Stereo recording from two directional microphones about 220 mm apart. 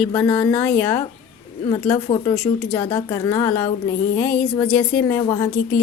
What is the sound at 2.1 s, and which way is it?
Speech, 25° left (ahead or behind).